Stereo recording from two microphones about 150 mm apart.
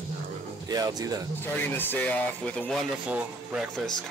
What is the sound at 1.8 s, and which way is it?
Speech, 10° left (ahead or behind).